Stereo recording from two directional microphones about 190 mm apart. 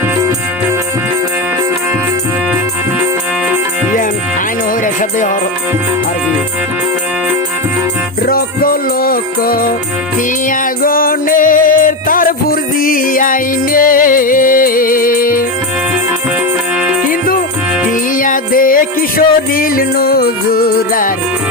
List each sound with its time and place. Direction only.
8.3 s music: 50° left (ahead or behind)
10.8 s music: 50° left (ahead or behind)
18.2 s music: 45° left (ahead or behind)